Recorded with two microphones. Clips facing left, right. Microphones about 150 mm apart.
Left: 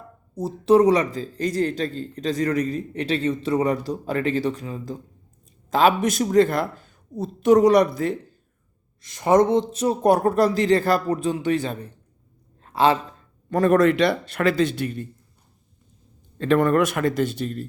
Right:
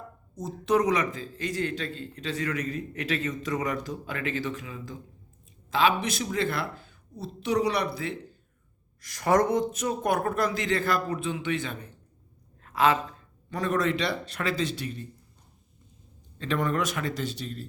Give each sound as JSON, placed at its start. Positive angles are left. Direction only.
{"t": 0.3, "sound": "speech", "side_deg": 30}
{"t": 9.0, "sound": "speech", "side_deg": 20}
{"t": 12.6, "sound": "a sound", "side_deg": 30}
{"t": 13.5, "sound": "a man's voice", "side_deg": 55}
{"t": 16.4, "sound": "a man's voice", "side_deg": 55}